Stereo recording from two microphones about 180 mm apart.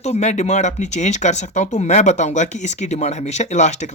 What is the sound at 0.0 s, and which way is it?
Speech, 40° left (ahead or behind).